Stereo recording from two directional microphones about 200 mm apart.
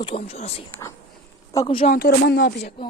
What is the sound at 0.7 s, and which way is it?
Speech, 15° left (ahead or behind).